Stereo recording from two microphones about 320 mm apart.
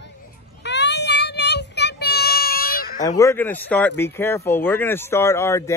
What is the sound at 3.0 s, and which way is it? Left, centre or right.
Speech, centre.